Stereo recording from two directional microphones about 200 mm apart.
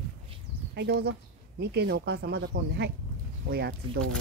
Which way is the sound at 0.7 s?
55° right (ahead or behind).